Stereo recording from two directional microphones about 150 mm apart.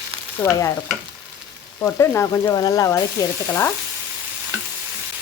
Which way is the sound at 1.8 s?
15° left (ahead or behind).